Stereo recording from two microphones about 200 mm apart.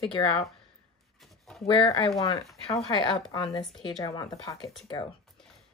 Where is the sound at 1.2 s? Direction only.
Centre (ahead or behind).